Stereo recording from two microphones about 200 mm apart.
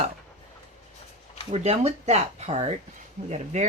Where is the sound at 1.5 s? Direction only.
30° right (ahead or behind).